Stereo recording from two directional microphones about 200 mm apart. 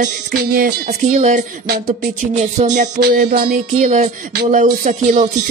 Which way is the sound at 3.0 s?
50° right (ahead or behind).